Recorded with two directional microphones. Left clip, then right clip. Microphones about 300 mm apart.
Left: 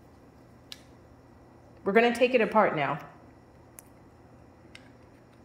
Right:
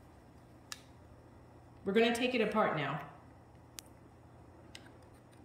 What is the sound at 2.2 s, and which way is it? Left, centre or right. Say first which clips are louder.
Speech: left 9 dB; right.